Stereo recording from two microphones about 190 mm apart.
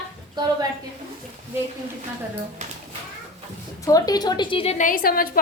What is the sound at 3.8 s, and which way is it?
A woman's voice, 20° left (ahead or behind).